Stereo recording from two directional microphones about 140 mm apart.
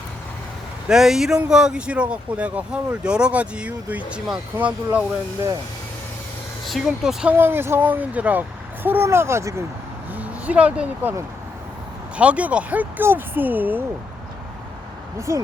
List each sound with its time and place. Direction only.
0.9 s speech: 5° right (ahead or behind)
6.7 s speech: centre (ahead or behind)
7.3 s speech: 15° right (ahead or behind)
10.1 s speech: 10° right (ahead or behind)
12.1 s speech: 10° right (ahead or behind)
15.3 s speech: 20° right (ahead or behind)